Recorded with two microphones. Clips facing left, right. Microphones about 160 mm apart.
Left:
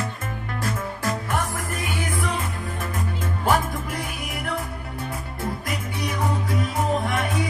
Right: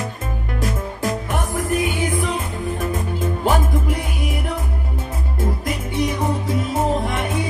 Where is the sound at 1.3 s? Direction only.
20° right (ahead or behind).